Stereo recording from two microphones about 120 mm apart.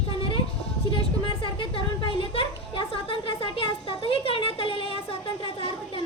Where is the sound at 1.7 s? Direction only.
50° left (ahead or behind).